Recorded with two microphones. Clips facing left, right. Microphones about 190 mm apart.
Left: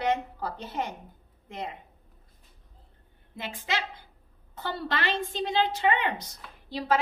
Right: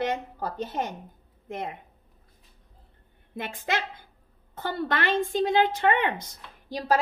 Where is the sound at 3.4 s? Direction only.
55° right (ahead or behind).